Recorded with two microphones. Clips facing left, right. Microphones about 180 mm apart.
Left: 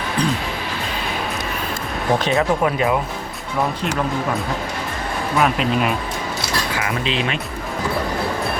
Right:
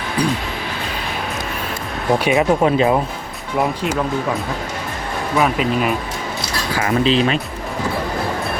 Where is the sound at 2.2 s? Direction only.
20° right (ahead or behind).